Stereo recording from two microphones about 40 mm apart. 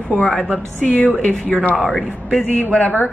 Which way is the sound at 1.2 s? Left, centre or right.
Left.